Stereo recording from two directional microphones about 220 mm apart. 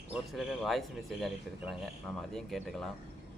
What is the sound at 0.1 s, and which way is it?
Speech, centre (ahead or behind).